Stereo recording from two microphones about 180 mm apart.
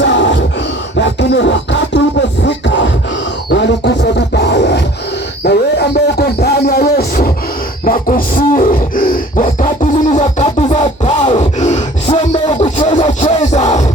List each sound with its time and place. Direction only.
0.0 s a sound: 90° left
0.9 s beatboxing: 80° left
3.5 s a sound: 75° left (ahead or behind)
5.5 s music: 65° left (ahead or behind)
7.9 s beatboxing: 50° left (ahead or behind)
12.5 s music: 40° left (ahead or behind)
12.8 s music: 25° left (ahead or behind)
13.2 s music: 40° left (ahead or behind)